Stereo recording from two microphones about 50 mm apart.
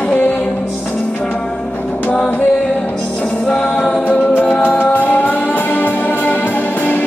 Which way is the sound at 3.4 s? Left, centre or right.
Centre.